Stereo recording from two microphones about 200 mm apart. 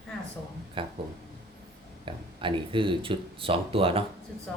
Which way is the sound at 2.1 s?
25° right (ahead or behind).